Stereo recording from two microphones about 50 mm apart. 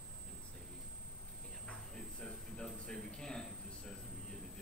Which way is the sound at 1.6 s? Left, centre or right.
Centre.